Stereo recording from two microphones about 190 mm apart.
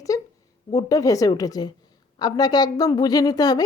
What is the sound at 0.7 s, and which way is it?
A woman's voice, 20° left (ahead or behind).